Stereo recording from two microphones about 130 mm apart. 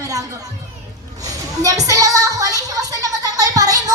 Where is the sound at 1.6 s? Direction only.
25° right (ahead or behind).